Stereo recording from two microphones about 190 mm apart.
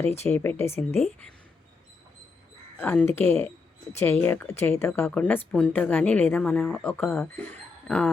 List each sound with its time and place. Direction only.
0.3 s speech: 10° left (ahead or behind)
2.7 s speech: 10° left (ahead or behind)